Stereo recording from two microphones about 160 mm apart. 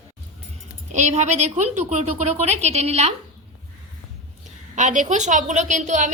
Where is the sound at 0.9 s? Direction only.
45° right (ahead or behind).